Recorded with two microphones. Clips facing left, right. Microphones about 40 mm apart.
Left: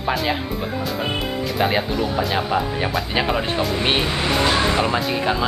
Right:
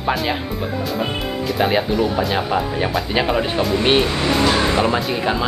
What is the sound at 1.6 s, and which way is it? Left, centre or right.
Speech, centre.